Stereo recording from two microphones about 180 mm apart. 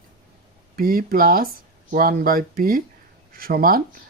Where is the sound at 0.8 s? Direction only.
55° right (ahead or behind).